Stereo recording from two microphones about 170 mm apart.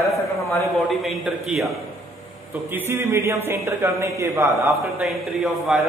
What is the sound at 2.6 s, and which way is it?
A man's voice, 15° right (ahead or behind).